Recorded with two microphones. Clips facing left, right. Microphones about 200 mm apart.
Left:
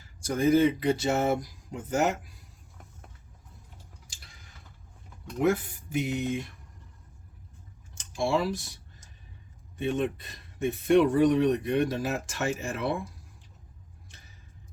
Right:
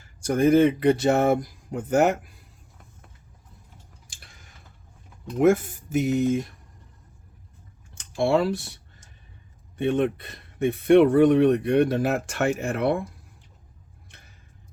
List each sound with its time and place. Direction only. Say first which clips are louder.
0.3 s speech: right 4 dB; 55° right (ahead or behind)
4.1 s a sound: right 2 dB; 55° right (ahead or behind)
5.4 s speech: right 6 dB; 45° right (ahead or behind)
7.9 s speech: right 6 dB; 60° right (ahead or behind)
9.7 s speech: right 6 dB; 60° right (ahead or behind)
14.1 s a sound: right 3 dB; 60° right (ahead or behind)